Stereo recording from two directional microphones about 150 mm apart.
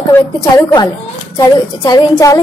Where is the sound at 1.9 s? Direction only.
25° left (ahead or behind).